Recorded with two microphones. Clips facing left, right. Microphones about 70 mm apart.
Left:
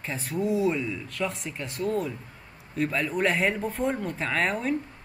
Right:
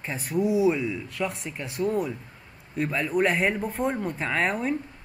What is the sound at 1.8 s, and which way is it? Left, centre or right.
Speech, centre.